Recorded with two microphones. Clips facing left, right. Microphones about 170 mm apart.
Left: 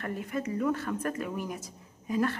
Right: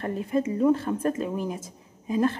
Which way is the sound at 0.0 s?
30° right (ahead or behind).